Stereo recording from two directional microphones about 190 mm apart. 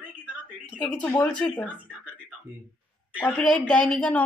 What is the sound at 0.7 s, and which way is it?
Speech, 5° left (ahead or behind).